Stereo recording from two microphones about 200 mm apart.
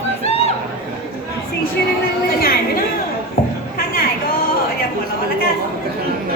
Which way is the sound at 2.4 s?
50° left (ahead or behind).